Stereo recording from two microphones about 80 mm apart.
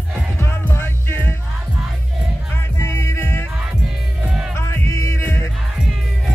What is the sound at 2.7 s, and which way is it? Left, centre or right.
Music, left.